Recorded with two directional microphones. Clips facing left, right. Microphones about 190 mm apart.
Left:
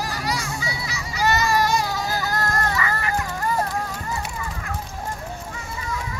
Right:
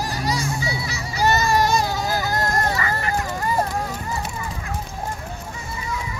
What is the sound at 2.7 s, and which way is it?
Vehicle, 35° right (ahead or behind).